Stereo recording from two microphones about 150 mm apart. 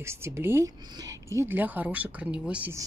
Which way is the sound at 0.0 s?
15° right (ahead or behind).